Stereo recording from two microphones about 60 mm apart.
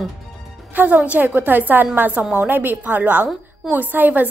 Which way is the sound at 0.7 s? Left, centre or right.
Right.